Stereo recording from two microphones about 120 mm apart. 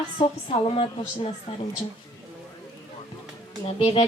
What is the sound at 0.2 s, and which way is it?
Speech, 50° left (ahead or behind).